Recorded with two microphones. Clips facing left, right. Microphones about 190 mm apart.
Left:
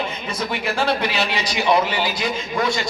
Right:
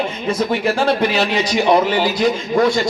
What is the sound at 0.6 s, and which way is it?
Speech, 50° right (ahead or behind).